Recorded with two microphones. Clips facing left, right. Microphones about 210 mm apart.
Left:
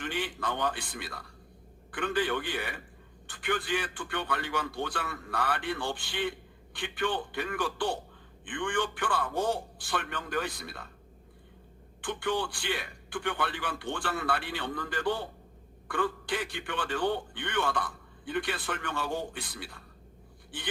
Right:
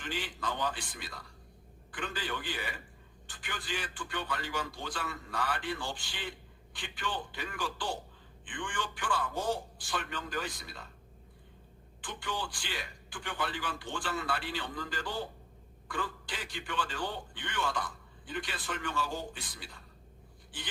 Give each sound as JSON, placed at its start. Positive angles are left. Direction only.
{"t": 0.0, "sound": "a man's voice", "side_deg": 60}
{"t": 12.0, "sound": "a man's voice", "side_deg": 60}